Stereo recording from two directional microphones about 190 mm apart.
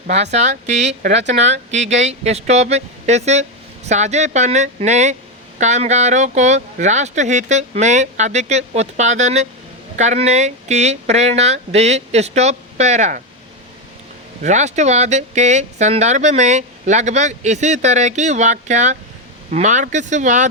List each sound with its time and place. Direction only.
0.1 s speech: 35° right (ahead or behind)
14.4 s speech: 35° right (ahead or behind)